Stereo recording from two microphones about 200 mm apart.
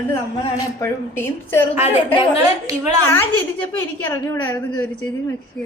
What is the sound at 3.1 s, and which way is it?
A woman's voice, 10° left (ahead or behind).